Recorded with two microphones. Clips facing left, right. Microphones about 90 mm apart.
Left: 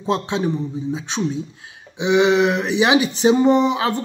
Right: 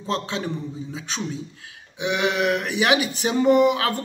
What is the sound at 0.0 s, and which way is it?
A man's voice, 20° left (ahead or behind).